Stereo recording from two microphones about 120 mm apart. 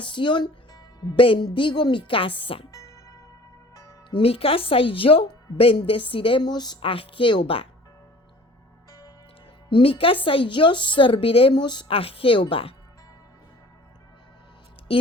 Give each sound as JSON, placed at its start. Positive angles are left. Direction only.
{"t": 0.0, "sound": "a woman's voice", "side_deg": 40}
{"t": 2.7, "sound": "music", "side_deg": 25}
{"t": 4.2, "sound": "a woman's voice", "side_deg": 55}
{"t": 8.9, "sound": "music", "side_deg": 30}
{"t": 9.6, "sound": "a woman's voice", "side_deg": 45}
{"t": 11.5, "sound": "a woman's voice", "side_deg": 40}
{"t": 14.9, "sound": "music", "side_deg": 50}